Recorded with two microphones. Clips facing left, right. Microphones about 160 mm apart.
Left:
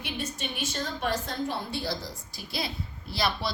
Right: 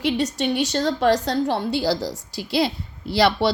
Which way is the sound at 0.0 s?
80° right.